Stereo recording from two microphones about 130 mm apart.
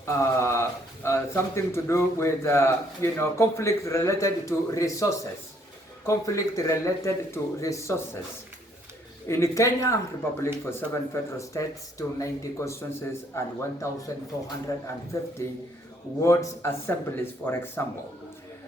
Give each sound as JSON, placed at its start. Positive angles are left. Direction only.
{"t": 0.0, "sound": "a man's voice", "side_deg": 20}
{"t": 9.2, "sound": "a man's voice", "side_deg": 20}